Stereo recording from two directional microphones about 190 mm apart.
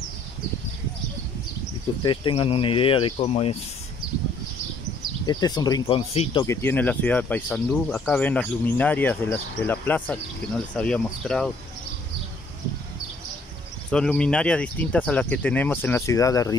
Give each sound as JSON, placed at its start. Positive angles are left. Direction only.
{"t": 2.0, "sound": "speech", "side_deg": 25}
{"t": 5.2, "sound": "speech", "side_deg": 20}
{"t": 6.4, "sound": "speech", "side_deg": 15}
{"t": 13.8, "sound": "speech", "side_deg": 5}